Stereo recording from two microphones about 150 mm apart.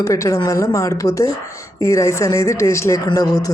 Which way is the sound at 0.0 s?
20° left (ahead or behind).